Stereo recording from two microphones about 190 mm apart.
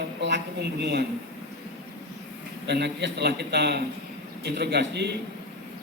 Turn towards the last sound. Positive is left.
turn(degrees=-65)  # may be behind; listen again after turning